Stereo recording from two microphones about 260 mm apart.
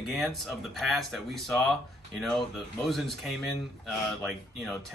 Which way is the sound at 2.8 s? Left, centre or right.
Centre.